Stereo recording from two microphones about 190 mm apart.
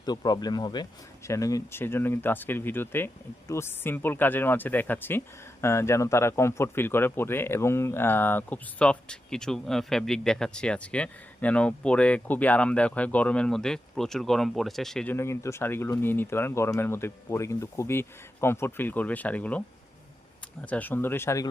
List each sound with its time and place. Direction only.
0.0 s speech: 20° left (ahead or behind)